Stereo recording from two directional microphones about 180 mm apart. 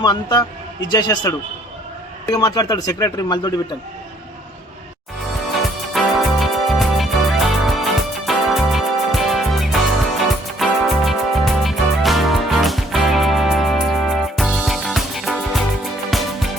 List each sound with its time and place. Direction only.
0.0 s speech: 25° left (ahead or behind)
5.9 s music: centre (ahead or behind)